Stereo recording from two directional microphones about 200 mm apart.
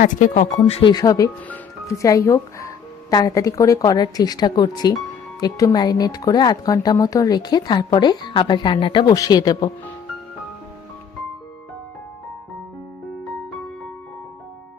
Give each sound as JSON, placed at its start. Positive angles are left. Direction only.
{"t": 0.0, "sound": "speech", "side_deg": 40}